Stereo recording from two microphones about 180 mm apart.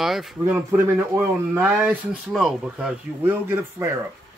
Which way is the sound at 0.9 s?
15° right (ahead or behind).